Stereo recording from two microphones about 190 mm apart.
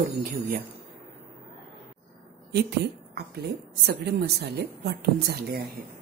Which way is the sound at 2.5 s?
55° right (ahead or behind).